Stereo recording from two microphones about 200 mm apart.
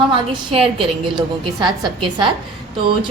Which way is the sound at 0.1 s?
25° right (ahead or behind).